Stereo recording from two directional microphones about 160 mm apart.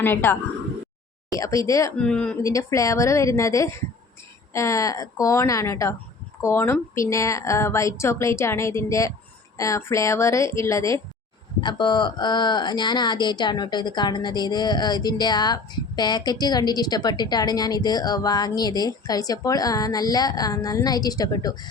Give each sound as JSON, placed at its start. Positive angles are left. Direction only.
{"t": 0.0, "sound": "a woman's voice", "side_deg": 15}
{"t": 2.0, "sound": "a woman's voice", "side_deg": 5}
{"t": 2.4, "sound": "a woman's voice", "side_deg": 20}